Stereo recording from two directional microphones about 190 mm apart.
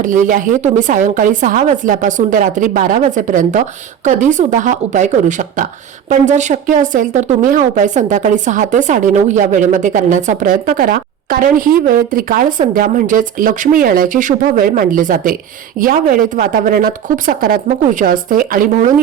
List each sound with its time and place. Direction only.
0.0 s a woman's voice: 45° right (ahead or behind)